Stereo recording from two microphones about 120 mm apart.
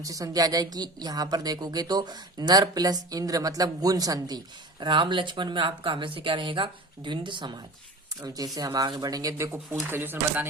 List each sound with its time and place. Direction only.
0.0 s a woman's voice: 30° right (ahead or behind)
9.8 s speech: 15° right (ahead or behind)